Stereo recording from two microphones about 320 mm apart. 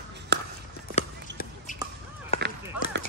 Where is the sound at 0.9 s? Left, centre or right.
Left.